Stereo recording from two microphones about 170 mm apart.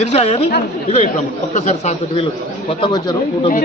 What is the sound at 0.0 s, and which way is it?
Speech, 40° left (ahead or behind).